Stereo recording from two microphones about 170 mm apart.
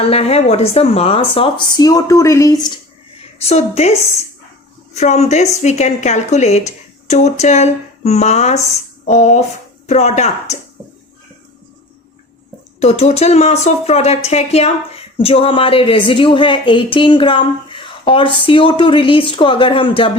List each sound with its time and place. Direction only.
0.1 s speech: 35° left (ahead or behind)
3.3 s speech: 40° left (ahead or behind)
4.9 s speech: 40° left (ahead or behind)
12.8 s speech: 40° left (ahead or behind)